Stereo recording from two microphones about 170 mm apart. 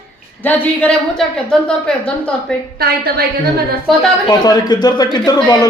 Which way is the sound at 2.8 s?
65° right (ahead or behind).